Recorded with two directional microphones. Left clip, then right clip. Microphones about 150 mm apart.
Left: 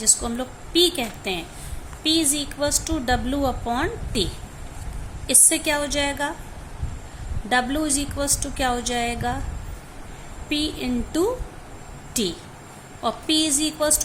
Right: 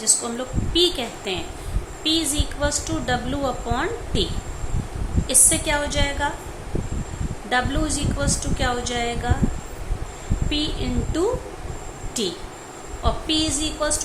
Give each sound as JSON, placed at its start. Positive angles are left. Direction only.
{"t": 0.0, "sound": "a woman's voice", "side_deg": 55}
{"t": 7.5, "sound": "a woman's voice", "side_deg": 60}
{"t": 10.5, "sound": "a woman's voice", "side_deg": 60}